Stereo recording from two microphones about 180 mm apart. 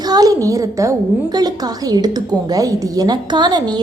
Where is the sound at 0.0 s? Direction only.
20° right (ahead or behind).